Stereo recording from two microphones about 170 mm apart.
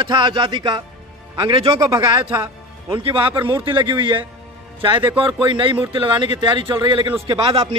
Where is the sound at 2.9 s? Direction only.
30° right (ahead or behind).